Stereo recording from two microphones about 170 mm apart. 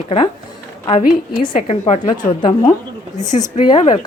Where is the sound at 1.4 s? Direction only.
35° left (ahead or behind).